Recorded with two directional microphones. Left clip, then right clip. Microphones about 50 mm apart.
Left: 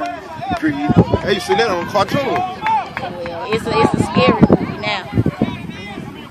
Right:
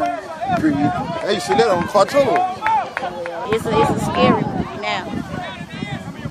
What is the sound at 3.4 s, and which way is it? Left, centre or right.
Speech, centre.